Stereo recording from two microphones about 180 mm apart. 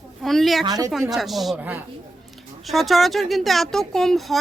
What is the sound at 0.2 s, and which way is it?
Speech, centre (ahead or behind).